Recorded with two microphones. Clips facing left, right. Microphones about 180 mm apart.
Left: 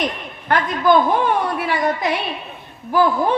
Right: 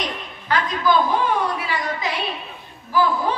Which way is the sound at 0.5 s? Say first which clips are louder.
Left 4 dB; 55° left (ahead or behind).